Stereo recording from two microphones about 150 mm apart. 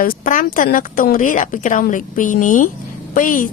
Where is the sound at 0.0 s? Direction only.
65° left (ahead or behind).